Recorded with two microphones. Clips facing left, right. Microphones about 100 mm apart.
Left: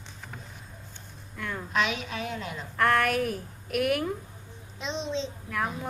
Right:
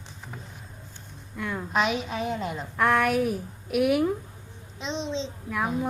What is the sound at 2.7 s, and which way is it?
Speech, 5° right (ahead or behind).